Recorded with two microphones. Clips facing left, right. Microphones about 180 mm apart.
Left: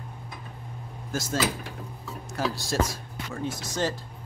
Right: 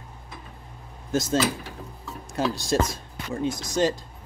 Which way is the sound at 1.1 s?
20° right (ahead or behind).